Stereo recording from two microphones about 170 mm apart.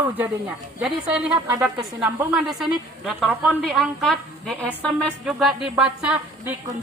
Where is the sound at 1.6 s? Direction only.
5° right (ahead or behind).